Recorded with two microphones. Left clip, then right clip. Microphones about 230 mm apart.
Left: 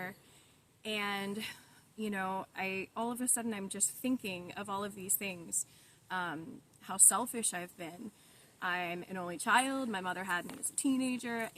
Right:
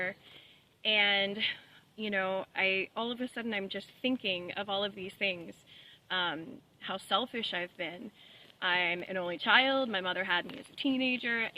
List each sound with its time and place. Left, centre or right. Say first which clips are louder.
0.8 s speech: right 10 dB; left